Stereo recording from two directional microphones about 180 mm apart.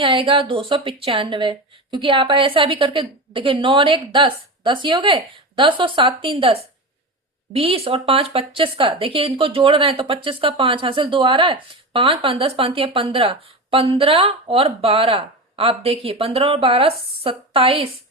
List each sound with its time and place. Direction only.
0.0 s speech: 30° right (ahead or behind)